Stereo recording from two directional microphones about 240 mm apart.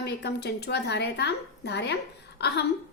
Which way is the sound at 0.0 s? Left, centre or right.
Left.